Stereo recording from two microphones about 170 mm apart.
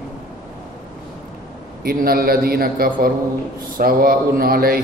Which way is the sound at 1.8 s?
60° right (ahead or behind).